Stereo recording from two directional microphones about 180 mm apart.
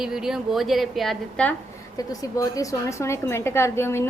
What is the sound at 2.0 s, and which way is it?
A woman's voice, 20° left (ahead or behind).